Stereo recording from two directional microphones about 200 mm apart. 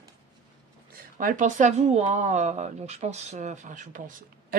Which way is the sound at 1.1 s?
40° right (ahead or behind).